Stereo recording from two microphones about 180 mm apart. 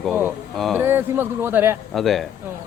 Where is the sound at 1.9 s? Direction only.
Centre (ahead or behind).